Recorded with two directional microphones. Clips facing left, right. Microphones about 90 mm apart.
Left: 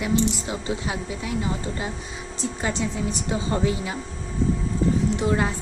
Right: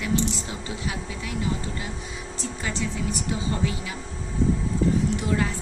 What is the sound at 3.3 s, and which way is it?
Speech, 30° left (ahead or behind).